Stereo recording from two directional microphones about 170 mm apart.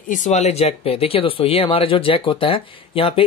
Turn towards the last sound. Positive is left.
turn(degrees=30)  # may be behind; listen again after turning